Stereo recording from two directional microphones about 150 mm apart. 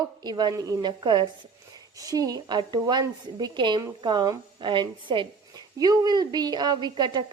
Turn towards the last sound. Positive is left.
turn(degrees=-30)  # may be behind; listen again after turning